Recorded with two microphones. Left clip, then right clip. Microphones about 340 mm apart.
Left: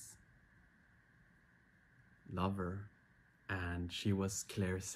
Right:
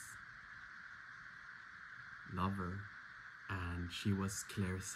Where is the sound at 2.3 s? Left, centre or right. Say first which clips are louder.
Left 1 dB; centre.